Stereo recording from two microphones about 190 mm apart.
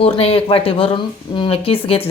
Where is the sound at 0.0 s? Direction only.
30° left (ahead or behind).